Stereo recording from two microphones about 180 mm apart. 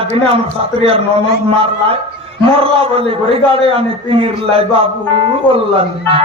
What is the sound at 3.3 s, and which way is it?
Speech, 30° right (ahead or behind).